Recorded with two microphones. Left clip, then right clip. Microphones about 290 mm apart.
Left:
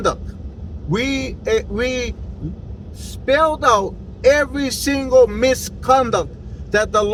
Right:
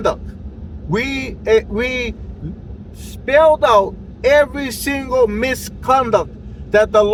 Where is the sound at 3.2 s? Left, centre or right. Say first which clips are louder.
Right 4 dB; centre.